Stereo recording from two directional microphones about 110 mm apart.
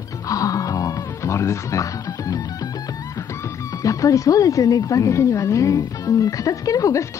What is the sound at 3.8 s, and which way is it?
Speech, 30° left (ahead or behind).